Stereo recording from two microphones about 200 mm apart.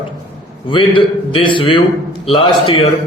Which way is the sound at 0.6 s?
25° left (ahead or behind).